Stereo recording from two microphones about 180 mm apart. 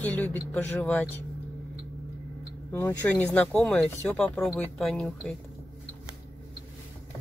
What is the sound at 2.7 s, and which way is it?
Speech, 10° left (ahead or behind).